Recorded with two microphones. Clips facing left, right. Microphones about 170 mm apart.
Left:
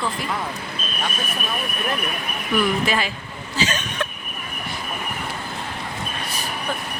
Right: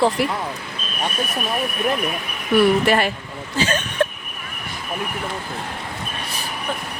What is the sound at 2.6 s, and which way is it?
A woman's voice, 60° right (ahead or behind).